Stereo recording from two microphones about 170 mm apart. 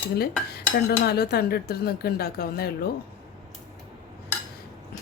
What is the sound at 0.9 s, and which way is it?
Speech, 65° left (ahead or behind).